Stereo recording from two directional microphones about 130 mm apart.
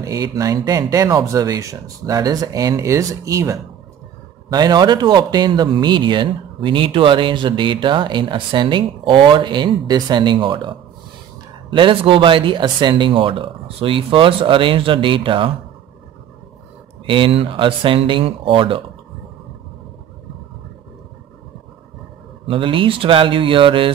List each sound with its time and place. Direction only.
0.0 s speech: 25° right (ahead or behind); by 15.5 s 40° right (ahead or behind)
17.0 s speech: 40° right (ahead or behind)
22.5 s speech: 40° right (ahead or behind)